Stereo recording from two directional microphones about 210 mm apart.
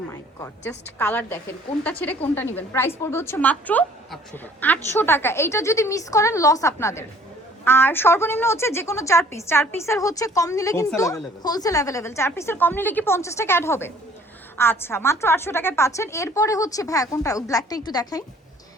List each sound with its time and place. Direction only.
0.1 s a woman's voice: 15° left (ahead or behind)